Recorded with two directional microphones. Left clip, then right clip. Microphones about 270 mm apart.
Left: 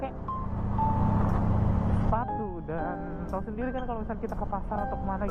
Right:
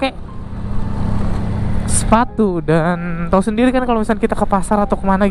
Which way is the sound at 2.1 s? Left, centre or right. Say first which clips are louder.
Right 19 dB; right.